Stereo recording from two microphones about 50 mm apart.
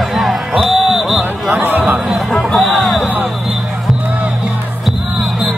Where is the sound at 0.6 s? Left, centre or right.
Centre.